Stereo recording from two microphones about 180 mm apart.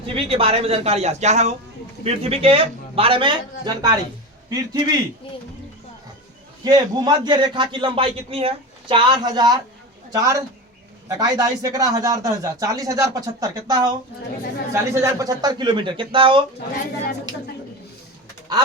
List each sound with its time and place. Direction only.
0.1 s a man's voice: 35° right (ahead or behind)
6.7 s a man's voice: 25° right (ahead or behind)